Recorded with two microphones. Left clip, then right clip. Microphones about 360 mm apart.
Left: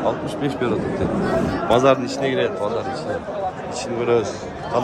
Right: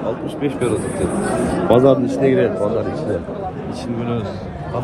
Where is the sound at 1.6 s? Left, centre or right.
Right.